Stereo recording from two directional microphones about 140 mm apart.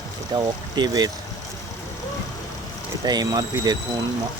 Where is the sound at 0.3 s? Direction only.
35° right (ahead or behind).